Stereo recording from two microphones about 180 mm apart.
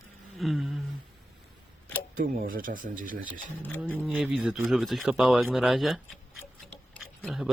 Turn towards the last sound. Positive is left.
turn(degrees=0)  # may be behind; listen again after turning